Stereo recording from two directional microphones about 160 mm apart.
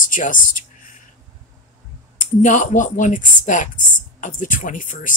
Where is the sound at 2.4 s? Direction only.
50° left (ahead or behind).